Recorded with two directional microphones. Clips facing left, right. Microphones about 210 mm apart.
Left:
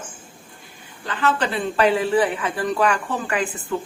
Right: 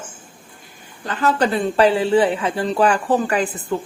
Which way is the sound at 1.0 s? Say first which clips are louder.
Right 4 dB; 40° right (ahead or behind).